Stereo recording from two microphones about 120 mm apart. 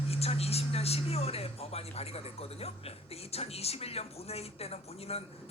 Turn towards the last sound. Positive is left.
turn(degrees=55)  # may be behind; listen again after turning